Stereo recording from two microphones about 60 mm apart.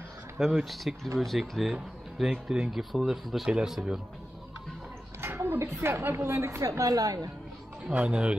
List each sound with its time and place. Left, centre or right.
0.4 s speech: centre
3.4 s speech: centre
5.2 s a sound: right
5.8 s a woman's voice: right
6.1 s a woman's voice: right
6.6 s a woman's voice: right
7.9 s speech: right